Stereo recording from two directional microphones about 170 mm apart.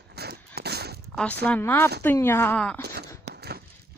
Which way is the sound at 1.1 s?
5° left (ahead or behind).